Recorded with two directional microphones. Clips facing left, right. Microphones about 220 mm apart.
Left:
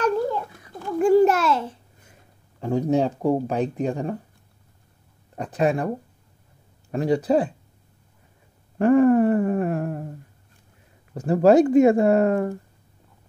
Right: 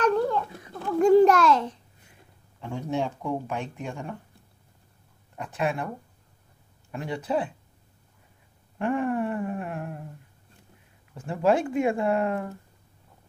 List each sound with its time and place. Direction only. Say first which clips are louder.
0.0 s a sound: left 1 dB; 5° left (ahead or behind)
2.6 s speech: left 8 dB; 40° left (ahead or behind)
5.3 s speech: left 7 dB; 40° left (ahead or behind)
8.7 s speech: left 11 dB; 40° left (ahead or behind)
11.2 s speech: left 8 dB; 40° left (ahead or behind)